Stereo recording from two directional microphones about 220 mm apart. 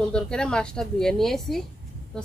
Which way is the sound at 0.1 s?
5° left (ahead or behind).